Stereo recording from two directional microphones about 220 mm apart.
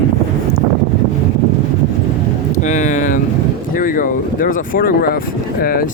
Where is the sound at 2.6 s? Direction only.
35° left (ahead or behind).